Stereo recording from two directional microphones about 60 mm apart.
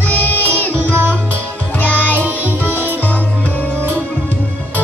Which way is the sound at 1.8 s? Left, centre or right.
Left.